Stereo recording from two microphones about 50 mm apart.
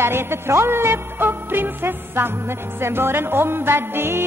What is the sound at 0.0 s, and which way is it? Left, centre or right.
Music, right.